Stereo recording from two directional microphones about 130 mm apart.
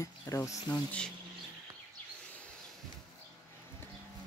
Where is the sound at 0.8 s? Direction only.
10° left (ahead or behind).